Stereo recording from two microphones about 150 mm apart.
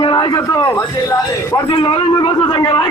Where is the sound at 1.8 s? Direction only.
35° left (ahead or behind).